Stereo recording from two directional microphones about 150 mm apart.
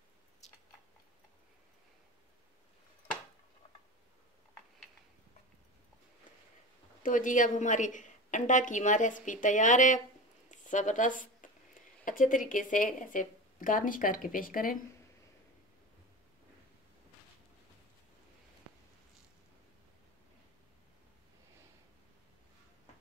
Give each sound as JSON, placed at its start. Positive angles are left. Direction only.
{"t": 0.4, "sound": "chewing", "side_deg": 50}
{"t": 7.0, "sound": "a woman's voice", "side_deg": 60}
{"t": 10.5, "sound": "a sound", "side_deg": 55}
{"t": 12.0, "sound": "a woman's voice", "side_deg": 65}